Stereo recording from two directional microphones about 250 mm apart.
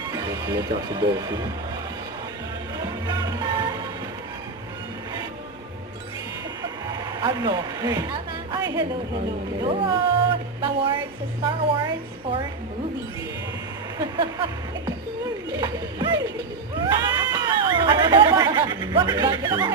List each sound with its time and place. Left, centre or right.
0.1 s speech: centre
3.1 s music: centre
7.2 s speech: centre
14.0 s speech: centre
15.6 s a sound: centre
16.9 s speech: centre